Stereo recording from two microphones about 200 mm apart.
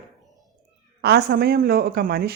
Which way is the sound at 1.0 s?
55° right (ahead or behind).